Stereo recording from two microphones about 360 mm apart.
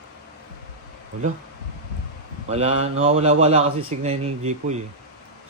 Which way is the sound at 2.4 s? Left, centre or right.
Centre.